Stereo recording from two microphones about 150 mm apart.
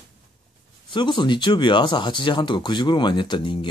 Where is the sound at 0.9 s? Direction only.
30° left (ahead or behind).